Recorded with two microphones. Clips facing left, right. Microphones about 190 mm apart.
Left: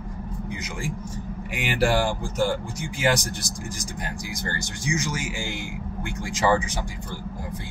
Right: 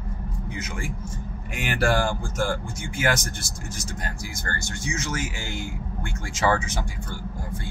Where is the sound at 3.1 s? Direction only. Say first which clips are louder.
Left 3 dB; 15° left (ahead or behind).